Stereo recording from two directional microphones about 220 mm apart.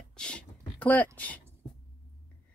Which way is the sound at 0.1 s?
5° left (ahead or behind).